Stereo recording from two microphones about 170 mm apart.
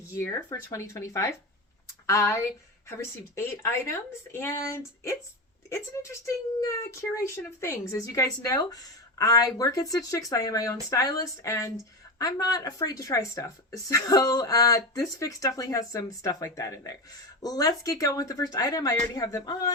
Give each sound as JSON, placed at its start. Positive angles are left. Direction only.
{"t": 0.1, "sound": "speech", "side_deg": 15}